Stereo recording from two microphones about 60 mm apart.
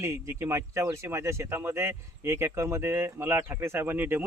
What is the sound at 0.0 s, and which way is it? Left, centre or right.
Speech, right.